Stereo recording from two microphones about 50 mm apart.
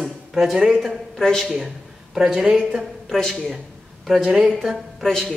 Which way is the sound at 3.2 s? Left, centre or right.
Centre.